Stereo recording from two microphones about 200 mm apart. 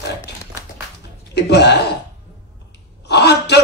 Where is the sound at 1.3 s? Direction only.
60° left (ahead or behind).